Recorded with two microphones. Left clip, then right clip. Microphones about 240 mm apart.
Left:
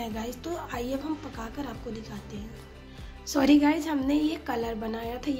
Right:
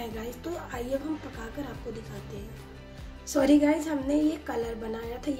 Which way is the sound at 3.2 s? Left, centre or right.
Left.